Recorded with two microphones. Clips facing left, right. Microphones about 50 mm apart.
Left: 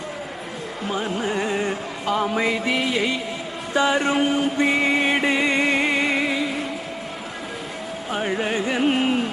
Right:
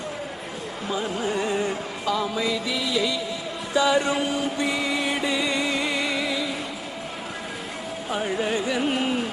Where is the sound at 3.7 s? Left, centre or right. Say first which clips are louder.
Left 1 dB; left.